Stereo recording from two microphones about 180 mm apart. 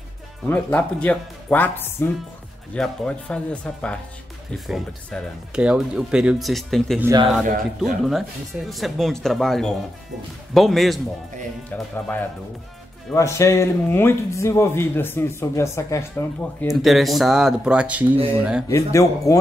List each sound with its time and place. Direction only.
0.5 s speech: 10° left (ahead or behind)
13.1 s speech: 15° left (ahead or behind)
16.8 s speech: centre (ahead or behind)
18.1 s speech: 30° right (ahead or behind)
18.7 s speech: 15° left (ahead or behind)